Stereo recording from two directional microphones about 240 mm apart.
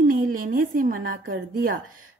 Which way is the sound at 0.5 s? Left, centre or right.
Right.